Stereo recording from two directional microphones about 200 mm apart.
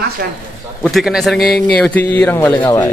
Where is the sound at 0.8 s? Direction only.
Centre (ahead or behind).